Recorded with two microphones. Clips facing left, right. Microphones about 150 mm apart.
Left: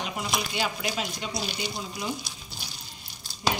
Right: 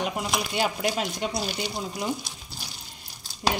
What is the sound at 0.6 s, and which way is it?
Speech, 45° right (ahead or behind).